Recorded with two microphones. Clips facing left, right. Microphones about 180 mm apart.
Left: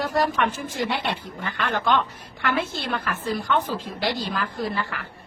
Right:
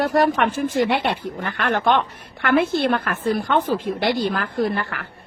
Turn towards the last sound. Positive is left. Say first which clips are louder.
# right 6 dB
turn(degrees=-60)  # may be behind; listen again after turning